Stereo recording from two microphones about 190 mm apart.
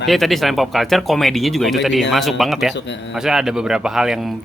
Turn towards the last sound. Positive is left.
turn(degrees=0)  # may be behind; listen again after turning